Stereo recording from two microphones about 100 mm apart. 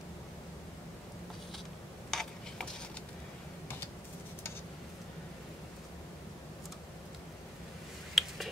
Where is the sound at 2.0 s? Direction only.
5° left (ahead or behind).